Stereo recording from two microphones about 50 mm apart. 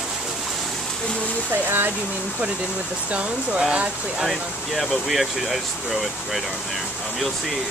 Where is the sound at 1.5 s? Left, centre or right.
Right.